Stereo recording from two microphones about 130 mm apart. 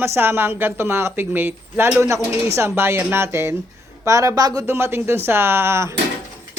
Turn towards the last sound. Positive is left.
turn(degrees=-20)  # may be behind; listen again after turning